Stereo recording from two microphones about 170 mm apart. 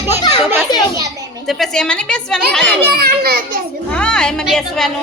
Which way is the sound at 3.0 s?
65° right (ahead or behind).